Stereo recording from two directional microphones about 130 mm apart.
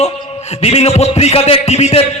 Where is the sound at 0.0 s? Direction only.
55° left (ahead or behind).